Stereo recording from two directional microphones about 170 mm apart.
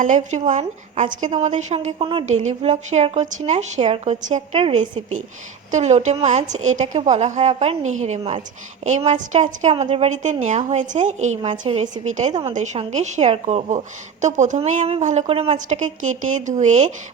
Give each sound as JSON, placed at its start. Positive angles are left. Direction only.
{"t": 0.0, "sound": "a woman's voice", "side_deg": -45}